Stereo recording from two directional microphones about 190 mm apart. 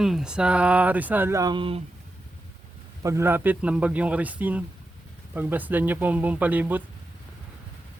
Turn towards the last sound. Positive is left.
turn(degrees=-10)  # may be behind; listen again after turning